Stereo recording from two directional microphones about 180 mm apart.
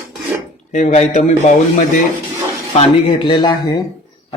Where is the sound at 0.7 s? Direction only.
40° left (ahead or behind).